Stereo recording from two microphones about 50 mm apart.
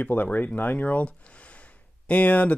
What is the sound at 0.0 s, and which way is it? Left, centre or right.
Speech, left.